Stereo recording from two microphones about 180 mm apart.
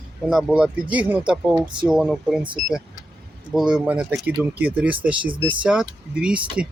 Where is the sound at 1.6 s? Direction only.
25° right (ahead or behind).